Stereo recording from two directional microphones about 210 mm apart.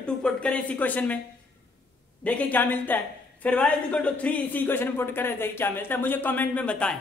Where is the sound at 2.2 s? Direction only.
5° left (ahead or behind).